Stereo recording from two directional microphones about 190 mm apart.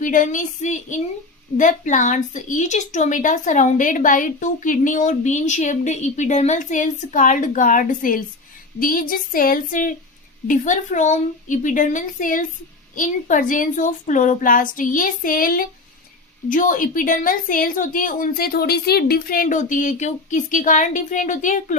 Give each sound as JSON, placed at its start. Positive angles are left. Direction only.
{"t": 0.0, "sound": "a woman's voice", "side_deg": 45}